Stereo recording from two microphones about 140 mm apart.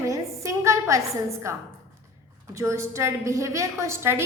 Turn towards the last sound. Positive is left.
turn(degrees=-20)  # may be behind; listen again after turning